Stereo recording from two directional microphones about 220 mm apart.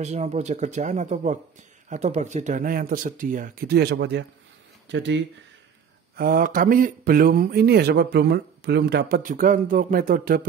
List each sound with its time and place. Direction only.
0.0 s a man's voice: 30° right (ahead or behind); by 5.2 s 55° right (ahead or behind)
6.1 s a man's voice: 40° right (ahead or behind)